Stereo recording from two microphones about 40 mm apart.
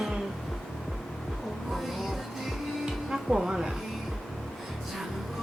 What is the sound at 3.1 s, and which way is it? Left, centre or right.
Speech, centre.